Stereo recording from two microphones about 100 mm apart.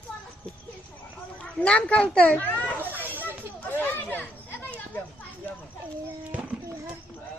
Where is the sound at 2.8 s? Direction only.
20° right (ahead or behind).